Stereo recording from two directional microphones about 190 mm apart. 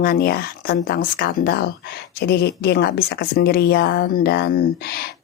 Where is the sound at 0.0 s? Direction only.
50° left (ahead or behind).